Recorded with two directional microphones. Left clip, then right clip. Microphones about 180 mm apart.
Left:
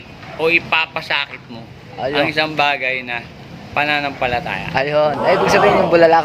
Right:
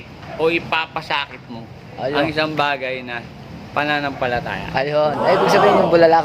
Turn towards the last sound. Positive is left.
turn(degrees=15)  # may be behind; listen again after turning